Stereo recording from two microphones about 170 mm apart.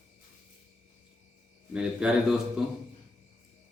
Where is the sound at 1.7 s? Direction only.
5° right (ahead or behind).